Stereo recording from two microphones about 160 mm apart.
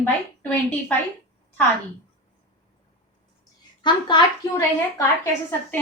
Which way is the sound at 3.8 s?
30° left (ahead or behind).